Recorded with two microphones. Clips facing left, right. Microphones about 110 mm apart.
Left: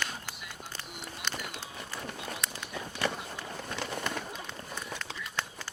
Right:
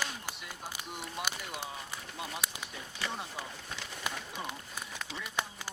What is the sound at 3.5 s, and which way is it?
Run, 55° left (ahead or behind).